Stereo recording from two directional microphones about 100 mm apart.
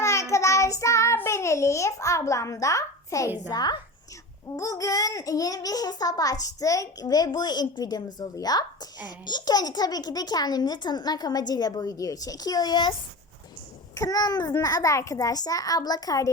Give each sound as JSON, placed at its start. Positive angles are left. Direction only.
{"t": 0.0, "sound": "child singing", "side_deg": 30}
{"t": 3.5, "sound": "a child's voice", "side_deg": 40}